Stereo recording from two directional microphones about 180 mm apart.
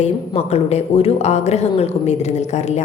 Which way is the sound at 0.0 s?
35° left (ahead or behind).